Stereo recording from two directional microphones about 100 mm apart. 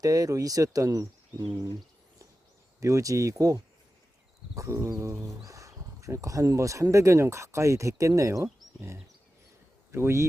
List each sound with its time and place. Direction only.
0.0 s speech: 35° right (ahead or behind)
2.8 s speech: 35° right (ahead or behind)